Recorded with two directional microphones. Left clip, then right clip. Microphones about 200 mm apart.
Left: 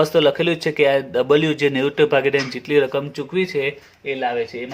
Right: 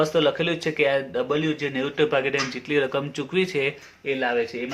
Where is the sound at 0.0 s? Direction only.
35° left (ahead or behind).